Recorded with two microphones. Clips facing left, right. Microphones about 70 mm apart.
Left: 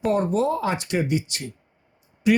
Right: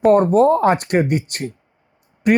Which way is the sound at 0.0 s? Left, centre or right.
Right.